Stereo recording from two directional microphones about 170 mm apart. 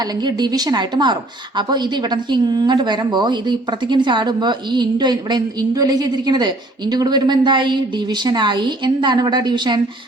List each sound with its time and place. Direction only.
0.0 s a woman's voice: 25° right (ahead or behind)